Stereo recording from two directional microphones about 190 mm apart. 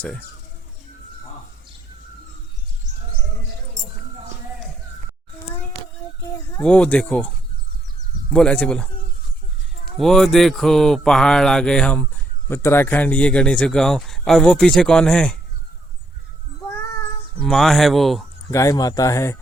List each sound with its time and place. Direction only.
6.6 s speech: 5° left (ahead or behind)
8.3 s speech: 5° left (ahead or behind)
10.0 s speech: centre (ahead or behind)
17.4 s speech: centre (ahead or behind)
18.5 s speech: 20° left (ahead or behind)